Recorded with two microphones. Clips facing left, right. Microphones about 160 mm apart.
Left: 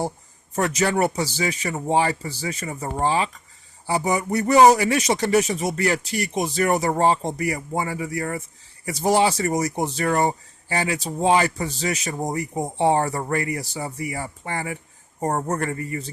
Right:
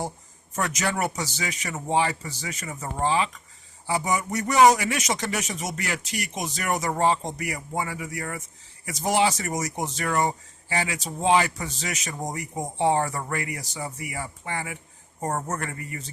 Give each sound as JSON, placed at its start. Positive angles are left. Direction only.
{"t": 0.5, "sound": "speech", "side_deg": 30}